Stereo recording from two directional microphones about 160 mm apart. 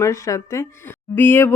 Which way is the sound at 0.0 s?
20° left (ahead or behind).